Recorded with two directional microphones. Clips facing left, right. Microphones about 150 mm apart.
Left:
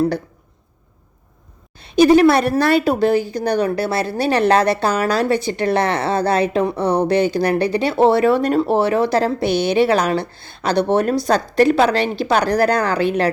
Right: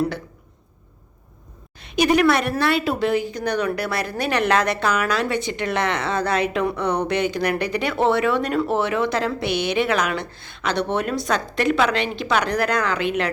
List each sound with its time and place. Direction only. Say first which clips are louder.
1.8 s speech: left 7 dB; 30° left (ahead or behind)